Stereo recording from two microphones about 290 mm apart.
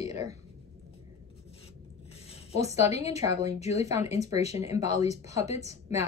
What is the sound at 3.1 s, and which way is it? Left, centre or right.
Speech, centre.